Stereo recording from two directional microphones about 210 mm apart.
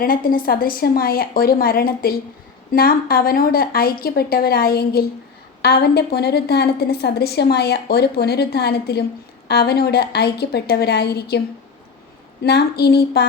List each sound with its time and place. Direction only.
0.0 s a woman's voice: 45° left (ahead or behind)
12.4 s a woman's voice: 50° left (ahead or behind)